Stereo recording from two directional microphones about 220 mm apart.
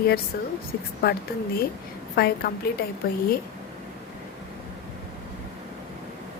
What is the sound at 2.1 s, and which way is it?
Speech, 45° left (ahead or behind).